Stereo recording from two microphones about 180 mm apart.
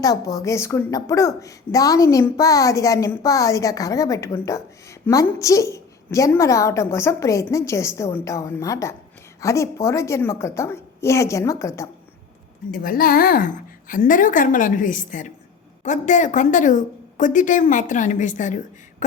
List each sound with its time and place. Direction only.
0.0 s a woman's voice: 20° left (ahead or behind)
12.8 s a woman's voice: 50° left (ahead or behind)